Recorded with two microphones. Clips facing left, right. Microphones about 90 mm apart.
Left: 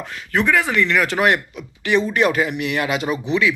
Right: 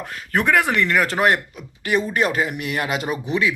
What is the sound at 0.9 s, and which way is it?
Speech, 40° right (ahead or behind).